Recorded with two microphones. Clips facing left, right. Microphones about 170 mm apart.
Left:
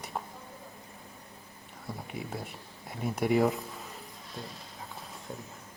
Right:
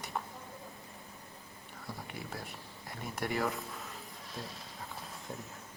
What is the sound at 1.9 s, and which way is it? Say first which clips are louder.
Speech: left 5 dB; centre (ahead or behind).